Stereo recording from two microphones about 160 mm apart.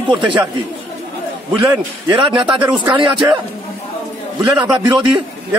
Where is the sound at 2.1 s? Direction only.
30° right (ahead or behind).